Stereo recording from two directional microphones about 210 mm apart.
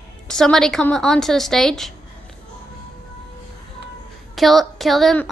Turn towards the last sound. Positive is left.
turn(degrees=0)  # may be behind; listen again after turning